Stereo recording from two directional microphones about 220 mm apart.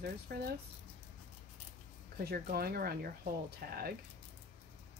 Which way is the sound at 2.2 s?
45° right (ahead or behind).